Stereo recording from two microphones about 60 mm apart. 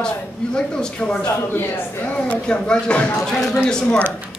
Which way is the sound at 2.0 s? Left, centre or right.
Centre.